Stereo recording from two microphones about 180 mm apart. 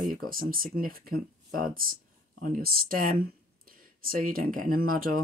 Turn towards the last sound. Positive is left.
turn(degrees=-50)  # may be behind; listen again after turning